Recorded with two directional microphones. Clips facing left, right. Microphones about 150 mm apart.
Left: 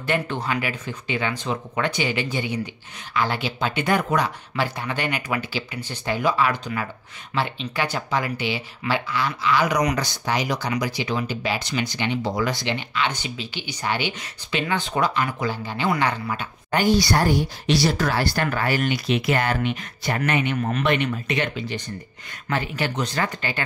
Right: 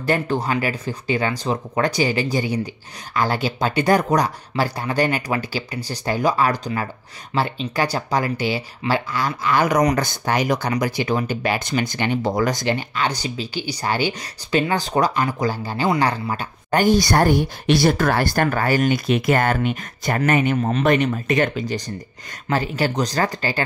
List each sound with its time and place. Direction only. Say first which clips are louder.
0.0 s speech: right 4 dB; 40° right (ahead or behind)
20.5 s speech: right 4 dB; 30° right (ahead or behind)
20.8 s speech: right 6 dB; 40° right (ahead or behind)